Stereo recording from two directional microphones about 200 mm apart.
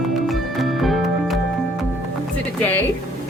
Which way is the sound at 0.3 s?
Centre (ahead or behind).